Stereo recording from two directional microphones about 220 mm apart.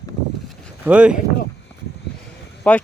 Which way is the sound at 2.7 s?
5° left (ahead or behind).